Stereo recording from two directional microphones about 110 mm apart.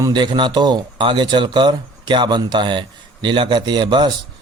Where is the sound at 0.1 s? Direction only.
45° right (ahead or behind).